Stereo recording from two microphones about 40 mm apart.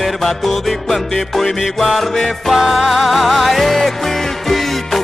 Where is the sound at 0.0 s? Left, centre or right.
Centre.